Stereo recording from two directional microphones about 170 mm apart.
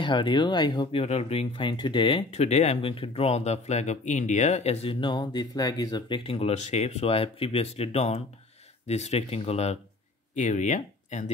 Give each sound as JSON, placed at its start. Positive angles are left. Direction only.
{"t": 0.0, "sound": "speech", "side_deg": 25}
{"t": 6.3, "sound": "speech", "side_deg": 40}